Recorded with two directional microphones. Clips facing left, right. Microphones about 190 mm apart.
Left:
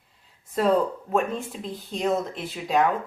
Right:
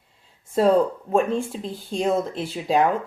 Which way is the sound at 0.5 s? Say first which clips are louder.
Right 4 dB; 30° right (ahead or behind).